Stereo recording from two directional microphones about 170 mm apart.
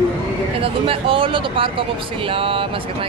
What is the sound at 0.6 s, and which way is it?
Speech, 30° right (ahead or behind).